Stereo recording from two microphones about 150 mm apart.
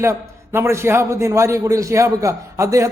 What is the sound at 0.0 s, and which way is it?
A man's voice, 20° right (ahead or behind).